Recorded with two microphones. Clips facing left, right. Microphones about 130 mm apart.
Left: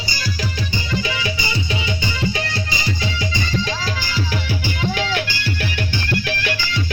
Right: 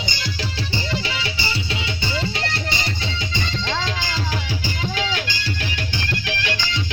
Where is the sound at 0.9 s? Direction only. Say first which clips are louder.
Left 3 dB; 30° right (ahead or behind).